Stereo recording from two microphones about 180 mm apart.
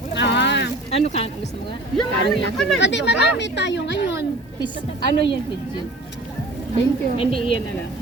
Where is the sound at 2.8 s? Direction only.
80° left.